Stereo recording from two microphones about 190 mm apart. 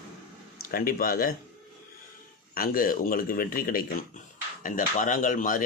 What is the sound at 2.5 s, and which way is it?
Speech, 50° left (ahead or behind).